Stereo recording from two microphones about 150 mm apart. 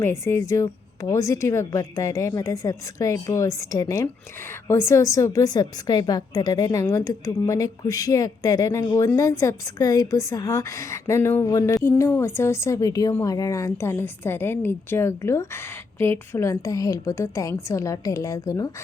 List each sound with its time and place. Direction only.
0.0 s a woman's voice: 15° left (ahead or behind)